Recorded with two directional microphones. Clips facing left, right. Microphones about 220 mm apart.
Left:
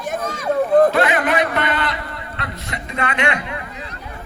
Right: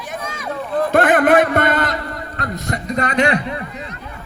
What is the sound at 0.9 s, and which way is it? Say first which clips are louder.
A man's voice: right 5 dB; 50° right (ahead or behind).